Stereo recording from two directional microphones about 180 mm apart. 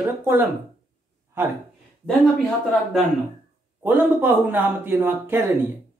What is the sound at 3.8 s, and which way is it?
Speech, 10° right (ahead or behind).